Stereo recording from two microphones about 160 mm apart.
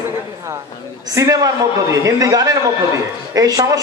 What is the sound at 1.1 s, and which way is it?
A man's voice, 20° right (ahead or behind).